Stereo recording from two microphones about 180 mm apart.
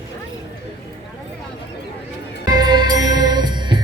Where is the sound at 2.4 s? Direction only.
20° right (ahead or behind).